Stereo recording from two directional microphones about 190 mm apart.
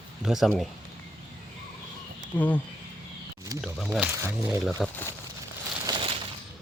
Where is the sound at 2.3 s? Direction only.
10° left (ahead or behind).